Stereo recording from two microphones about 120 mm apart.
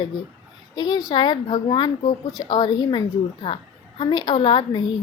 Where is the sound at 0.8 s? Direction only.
35° left (ahead or behind).